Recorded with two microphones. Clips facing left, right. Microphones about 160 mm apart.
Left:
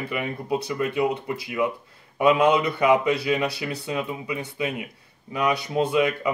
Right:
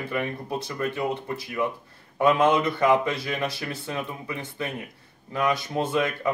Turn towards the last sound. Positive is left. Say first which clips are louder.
# left 3 dB
turn(degrees=15)  # may be behind; listen again after turning